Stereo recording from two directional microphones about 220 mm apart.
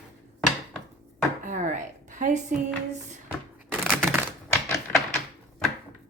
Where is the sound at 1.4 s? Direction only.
35° right (ahead or behind).